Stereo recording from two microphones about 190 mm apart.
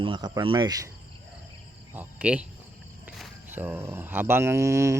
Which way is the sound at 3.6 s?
10° right (ahead or behind).